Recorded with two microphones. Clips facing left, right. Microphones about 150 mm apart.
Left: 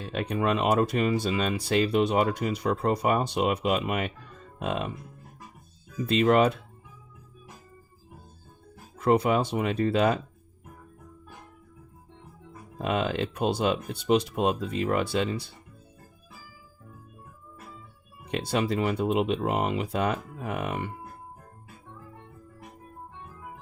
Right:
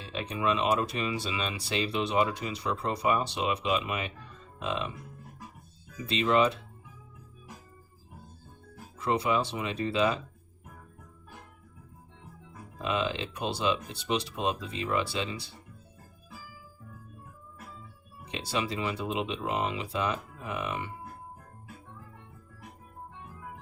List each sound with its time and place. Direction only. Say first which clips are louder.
0.0 s speech: left 4 dB; 50° left (ahead or behind)
6.1 s speech: left 4 dB; 50° left (ahead or behind)
9.0 s speech: left 5 dB; 50° left (ahead or behind)
12.8 s speech: left 4 dB; 50° left (ahead or behind)
18.3 s speech: left 5 dB; 50° left (ahead or behind)